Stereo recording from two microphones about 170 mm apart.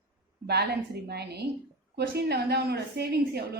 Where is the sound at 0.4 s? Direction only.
70° right (ahead or behind).